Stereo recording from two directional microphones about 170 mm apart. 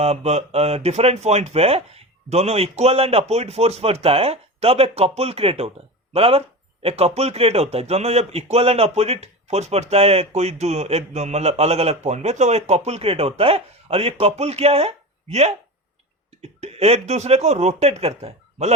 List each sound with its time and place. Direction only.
0.0 s a man's voice: 40° right (ahead or behind)